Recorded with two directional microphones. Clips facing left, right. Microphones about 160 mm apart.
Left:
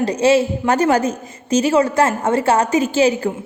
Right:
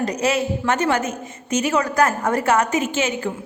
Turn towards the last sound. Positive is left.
turn(degrees=35)  # may be behind; listen again after turning